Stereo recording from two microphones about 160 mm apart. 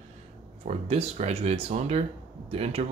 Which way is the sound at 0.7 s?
40° right (ahead or behind).